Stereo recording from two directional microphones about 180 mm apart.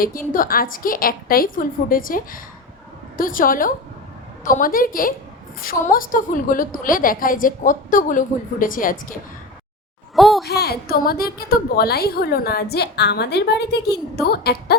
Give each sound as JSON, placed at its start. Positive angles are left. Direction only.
{"t": 0.0, "sound": "a woman's voice", "side_deg": 50}
{"t": 10.2, "sound": "a sound", "side_deg": 0}
{"t": 10.4, "sound": "a woman's voice", "side_deg": 60}